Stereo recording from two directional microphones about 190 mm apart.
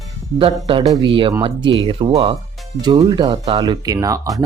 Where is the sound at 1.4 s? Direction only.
25° right (ahead or behind).